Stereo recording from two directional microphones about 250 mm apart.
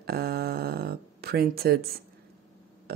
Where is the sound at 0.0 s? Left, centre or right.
Right.